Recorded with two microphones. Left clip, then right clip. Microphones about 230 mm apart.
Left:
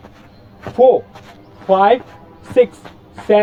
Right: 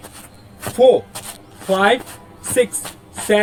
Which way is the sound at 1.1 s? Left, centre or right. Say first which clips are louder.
Right 5 dB; right.